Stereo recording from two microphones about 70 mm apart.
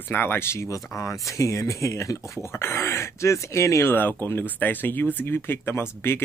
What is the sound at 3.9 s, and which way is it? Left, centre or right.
Speech, left.